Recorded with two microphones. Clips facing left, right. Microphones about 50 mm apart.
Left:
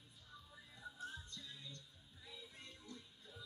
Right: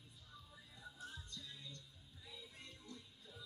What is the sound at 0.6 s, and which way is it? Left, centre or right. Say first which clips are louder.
Music: left 4 dB; centre.